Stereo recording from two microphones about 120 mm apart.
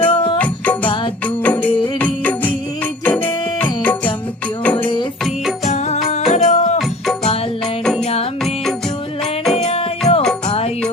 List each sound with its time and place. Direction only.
0.0 s music: 45° left (ahead or behind)
0.3 s music: 15° left (ahead or behind)
3.0 s music: 15° left (ahead or behind)
5.6 s music: 65° left (ahead or behind)
8.0 s music: 60° left (ahead or behind)
9.4 s music: centre (ahead or behind)
10.0 s music: 30° left (ahead or behind)
10.4 s music: 55° left (ahead or behind)